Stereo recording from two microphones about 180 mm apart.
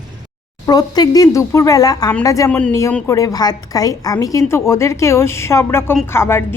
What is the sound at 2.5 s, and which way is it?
Speech, 5° left (ahead or behind).